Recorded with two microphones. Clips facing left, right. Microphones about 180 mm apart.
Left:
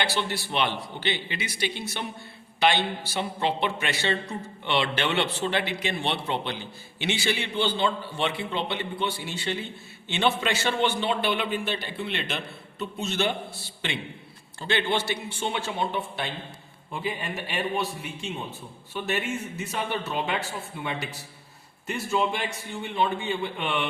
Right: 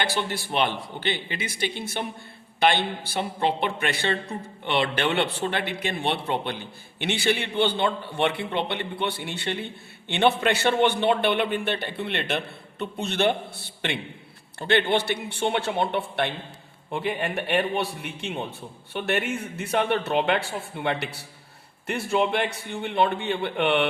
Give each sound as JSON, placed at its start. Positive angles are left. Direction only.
{"t": 0.0, "sound": "a man's voice", "side_deg": -50}